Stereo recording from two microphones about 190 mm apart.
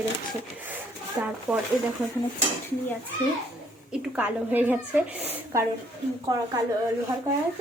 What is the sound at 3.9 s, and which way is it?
A woman's voice, 5° right (ahead or behind).